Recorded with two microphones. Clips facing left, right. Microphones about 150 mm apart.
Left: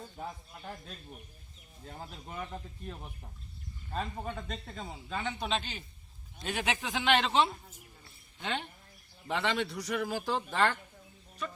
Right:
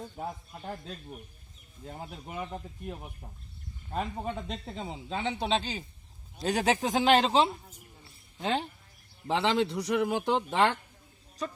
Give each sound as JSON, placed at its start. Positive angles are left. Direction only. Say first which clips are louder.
{"t": 0.2, "sound": "speech", "louder": "right 3 dB", "side_deg": -25}
{"t": 2.2, "sound": "a man's voice", "louder": "right 3 dB", "side_deg": -15}